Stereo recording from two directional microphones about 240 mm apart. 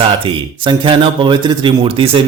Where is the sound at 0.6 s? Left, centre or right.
Right.